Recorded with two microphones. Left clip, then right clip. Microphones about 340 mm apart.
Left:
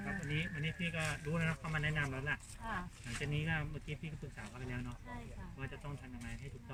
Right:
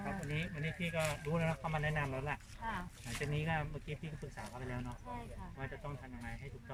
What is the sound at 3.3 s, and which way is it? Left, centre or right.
Speech, centre.